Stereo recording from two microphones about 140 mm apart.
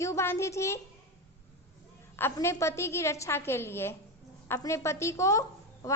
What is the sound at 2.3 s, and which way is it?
A woman's voice, 20° left (ahead or behind).